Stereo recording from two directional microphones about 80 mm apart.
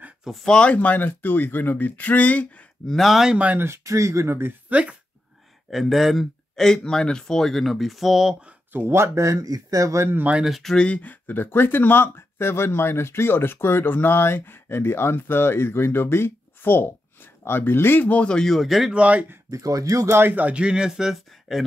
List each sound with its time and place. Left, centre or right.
0.2 s speech: centre
2.9 s speech: centre
3.3 s speech: centre
3.6 s speech: right; by 4.9 s centre
5.7 s speech: centre
8.7 s speech: right
10.1 s speech: centre
10.4 s speech: centre
18.9 s speech: centre
19.5 s speech: right
20.2 s speech: right; by 21.6 s centre